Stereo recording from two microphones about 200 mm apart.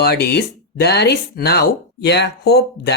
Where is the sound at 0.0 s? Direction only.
55° left (ahead or behind).